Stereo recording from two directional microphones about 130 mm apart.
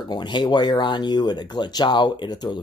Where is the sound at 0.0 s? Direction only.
35° left (ahead or behind).